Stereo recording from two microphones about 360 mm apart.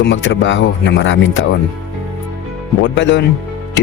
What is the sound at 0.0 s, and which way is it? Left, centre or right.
Speech, left.